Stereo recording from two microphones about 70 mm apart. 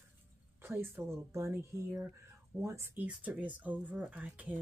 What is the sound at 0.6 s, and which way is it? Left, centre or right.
Speech, right.